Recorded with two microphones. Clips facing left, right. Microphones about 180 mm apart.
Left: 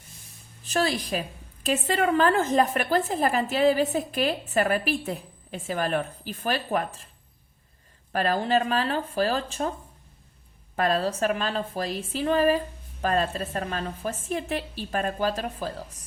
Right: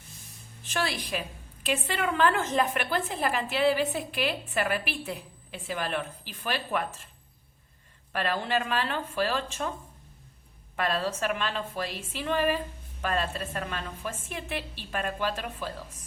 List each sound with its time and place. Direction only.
0.6 s a woman's voice: 40° left (ahead or behind)
8.1 s a woman's voice: 40° left (ahead or behind)
10.8 s a woman's voice: 40° left (ahead or behind)